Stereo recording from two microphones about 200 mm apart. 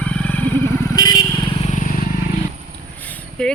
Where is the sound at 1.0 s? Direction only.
20° left (ahead or behind).